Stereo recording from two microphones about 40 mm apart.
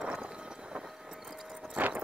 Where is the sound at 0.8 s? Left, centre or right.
Centre.